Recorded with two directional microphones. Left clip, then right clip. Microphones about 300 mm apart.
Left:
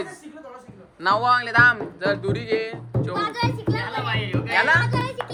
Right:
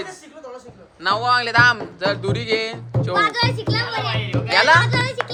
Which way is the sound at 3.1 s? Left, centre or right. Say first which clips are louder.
Right 7 dB; right.